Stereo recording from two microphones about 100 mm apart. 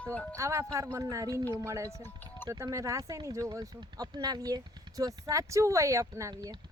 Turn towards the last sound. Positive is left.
turn(degrees=-30)  # may be behind; listen again after turning